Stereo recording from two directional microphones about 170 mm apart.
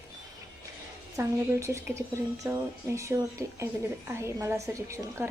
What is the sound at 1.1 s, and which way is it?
A woman's voice, 15° right (ahead or behind).